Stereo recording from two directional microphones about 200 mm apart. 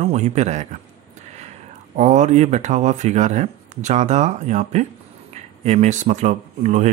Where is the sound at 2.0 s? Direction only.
35° right (ahead or behind).